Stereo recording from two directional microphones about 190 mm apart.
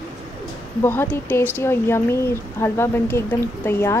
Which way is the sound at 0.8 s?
10° left (ahead or behind).